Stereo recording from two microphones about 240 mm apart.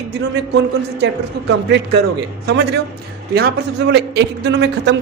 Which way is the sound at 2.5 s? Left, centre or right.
Right.